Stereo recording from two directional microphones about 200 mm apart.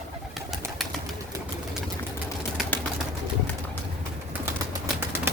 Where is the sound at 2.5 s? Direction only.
5° left (ahead or behind).